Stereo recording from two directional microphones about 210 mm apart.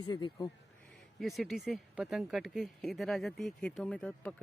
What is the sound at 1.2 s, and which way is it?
Speech, centre (ahead or behind).